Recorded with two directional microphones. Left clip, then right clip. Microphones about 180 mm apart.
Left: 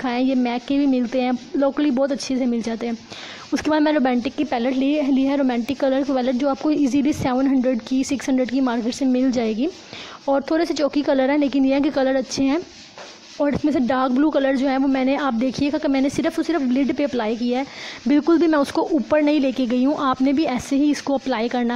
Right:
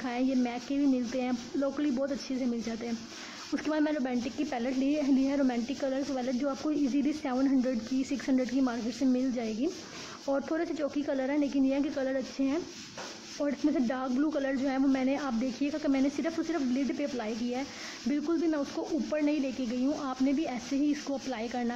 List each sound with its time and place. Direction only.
0.0 s a woman's voice: 45° left (ahead or behind)